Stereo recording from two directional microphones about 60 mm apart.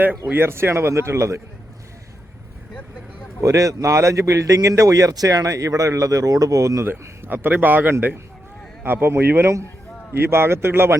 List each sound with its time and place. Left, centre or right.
0.3 s speech: right
3.4 s a man's voice: right
6.8 s a man's voice: right